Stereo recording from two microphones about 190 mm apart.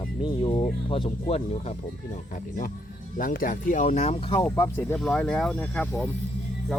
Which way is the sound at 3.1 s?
45° left (ahead or behind).